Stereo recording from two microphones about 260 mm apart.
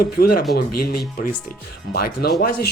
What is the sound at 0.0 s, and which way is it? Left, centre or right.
Speech, left.